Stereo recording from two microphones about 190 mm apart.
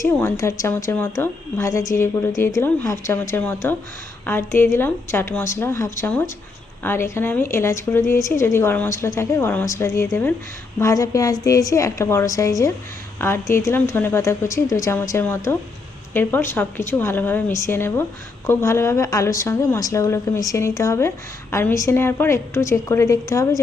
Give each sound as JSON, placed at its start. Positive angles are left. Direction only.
{"t": 0.0, "sound": "a woman's voice", "side_deg": 15}